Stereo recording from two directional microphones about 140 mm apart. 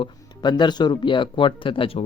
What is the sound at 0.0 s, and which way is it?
Speech, 35° left (ahead or behind).